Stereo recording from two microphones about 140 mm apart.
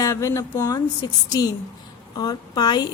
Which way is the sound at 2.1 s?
30° left (ahead or behind).